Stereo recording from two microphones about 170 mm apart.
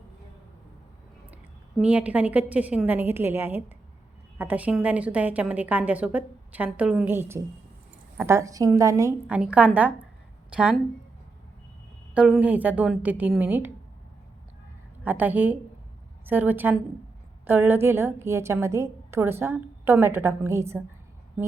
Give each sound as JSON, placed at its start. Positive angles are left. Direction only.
{"t": 1.8, "sound": "a woman's voice", "side_deg": -10}
{"t": 9.2, "sound": "a woman's voice", "side_deg": -5}
{"t": 12.1, "sound": "a woman's voice", "side_deg": -5}
{"t": 15.0, "sound": "a woman's voice", "side_deg": -10}